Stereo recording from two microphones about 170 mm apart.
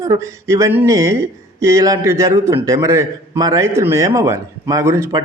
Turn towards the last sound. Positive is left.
turn(degrees=-15)  # may be behind; listen again after turning